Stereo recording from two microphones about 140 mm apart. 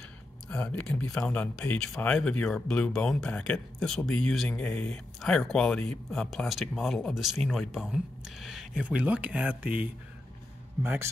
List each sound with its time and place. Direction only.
0.5 s a man's voice: 10° left (ahead or behind); by 11.1 s 15° right (ahead or behind)